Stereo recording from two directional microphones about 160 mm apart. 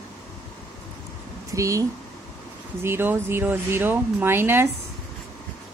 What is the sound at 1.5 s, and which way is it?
Speech, 20° right (ahead or behind).